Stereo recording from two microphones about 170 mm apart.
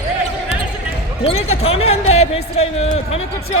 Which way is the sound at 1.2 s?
35° left (ahead or behind).